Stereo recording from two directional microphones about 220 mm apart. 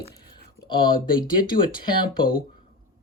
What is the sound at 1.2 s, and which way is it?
Speech, 40° left (ahead or behind).